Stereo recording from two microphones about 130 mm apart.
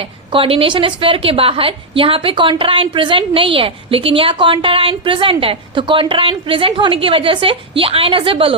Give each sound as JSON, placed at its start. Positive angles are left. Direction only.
{"t": 0.3, "sound": "a woman's voice", "side_deg": -45}